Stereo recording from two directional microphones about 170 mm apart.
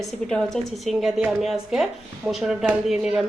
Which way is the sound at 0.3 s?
Centre (ahead or behind).